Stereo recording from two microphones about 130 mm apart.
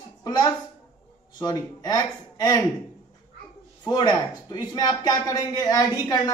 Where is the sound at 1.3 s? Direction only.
30° left (ahead or behind).